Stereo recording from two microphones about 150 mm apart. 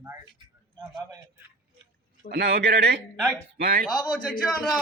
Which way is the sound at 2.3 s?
90° right.